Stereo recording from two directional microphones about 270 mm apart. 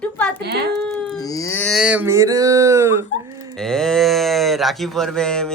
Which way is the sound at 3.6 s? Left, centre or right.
Centre.